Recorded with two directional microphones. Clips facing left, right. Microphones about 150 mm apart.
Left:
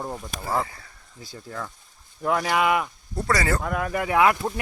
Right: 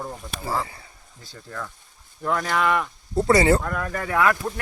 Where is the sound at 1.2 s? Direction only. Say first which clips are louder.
Left 1 dB; 15° left (ahead or behind).